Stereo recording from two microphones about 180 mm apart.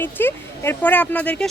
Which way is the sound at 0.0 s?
10° left (ahead or behind).